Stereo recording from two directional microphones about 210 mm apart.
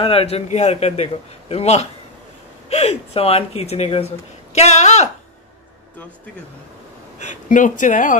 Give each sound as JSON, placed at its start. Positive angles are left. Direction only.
{"t": 0.0, "sound": "a man's voice", "side_deg": 25}
{"t": 7.2, "sound": "speech", "side_deg": 35}